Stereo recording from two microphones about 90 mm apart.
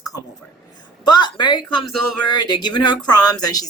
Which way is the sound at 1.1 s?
55° left (ahead or behind).